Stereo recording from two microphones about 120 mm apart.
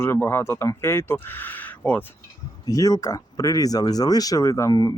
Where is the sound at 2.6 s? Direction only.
30° left (ahead or behind).